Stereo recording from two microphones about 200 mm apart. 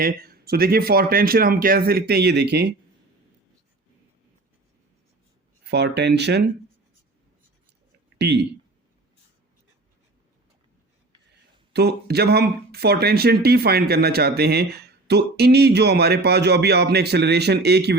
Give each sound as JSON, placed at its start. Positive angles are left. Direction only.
{"t": 0.0, "sound": "speech", "side_deg": -50}
{"t": 5.7, "sound": "speech", "side_deg": -55}
{"t": 8.2, "sound": "speech", "side_deg": -55}
{"t": 11.7, "sound": "speech", "side_deg": -55}